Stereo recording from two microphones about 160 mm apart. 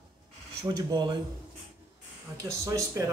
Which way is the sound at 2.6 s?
20° right (ahead or behind).